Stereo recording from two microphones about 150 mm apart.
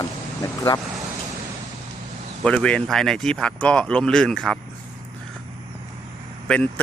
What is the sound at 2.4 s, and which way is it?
Speech, 5° left (ahead or behind).